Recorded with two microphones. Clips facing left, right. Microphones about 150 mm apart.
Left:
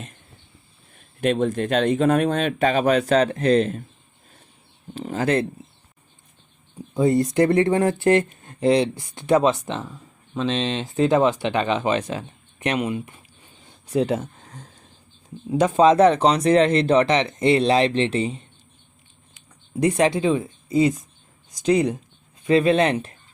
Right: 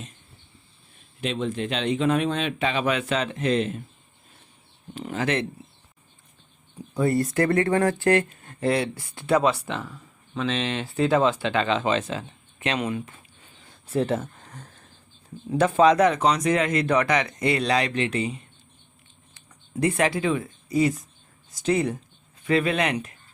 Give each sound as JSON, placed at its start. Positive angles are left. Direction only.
{"t": 1.2, "sound": "speech", "side_deg": 50}
{"t": 4.9, "sound": "speech", "side_deg": 35}
{"t": 6.9, "sound": "speech", "side_deg": 20}
{"t": 19.3, "sound": "speech", "side_deg": 15}